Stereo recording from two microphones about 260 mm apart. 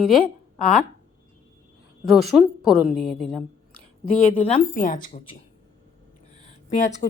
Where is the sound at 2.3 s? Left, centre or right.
Centre.